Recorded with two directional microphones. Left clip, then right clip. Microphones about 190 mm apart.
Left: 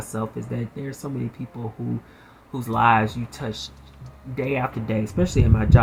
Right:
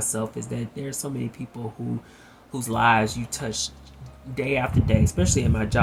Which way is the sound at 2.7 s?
5° right (ahead or behind).